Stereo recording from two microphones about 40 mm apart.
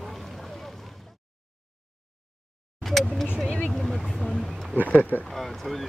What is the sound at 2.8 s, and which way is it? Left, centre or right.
Vehicle, centre.